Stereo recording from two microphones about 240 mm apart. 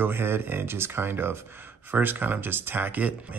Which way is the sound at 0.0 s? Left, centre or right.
Centre.